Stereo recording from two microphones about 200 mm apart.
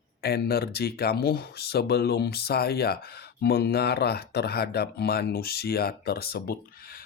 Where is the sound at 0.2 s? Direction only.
55° left (ahead or behind).